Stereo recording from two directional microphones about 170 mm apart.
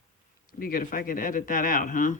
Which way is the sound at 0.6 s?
60° left (ahead or behind).